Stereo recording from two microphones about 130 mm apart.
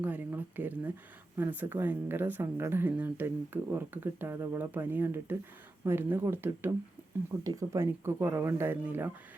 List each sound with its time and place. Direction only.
0.0 s speech: 15° right (ahead or behind)